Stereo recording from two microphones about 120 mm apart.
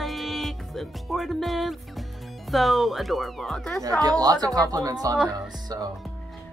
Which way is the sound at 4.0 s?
35° right (ahead or behind).